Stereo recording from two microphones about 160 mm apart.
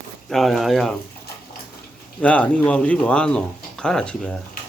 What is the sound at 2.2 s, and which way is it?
Speech, 10° left (ahead or behind).